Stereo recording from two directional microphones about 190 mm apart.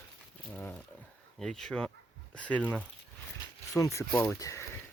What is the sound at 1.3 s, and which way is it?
Speech, 5° left (ahead or behind).